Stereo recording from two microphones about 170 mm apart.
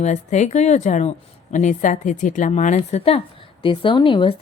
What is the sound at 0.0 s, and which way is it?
A woman's voice, 45° left (ahead or behind).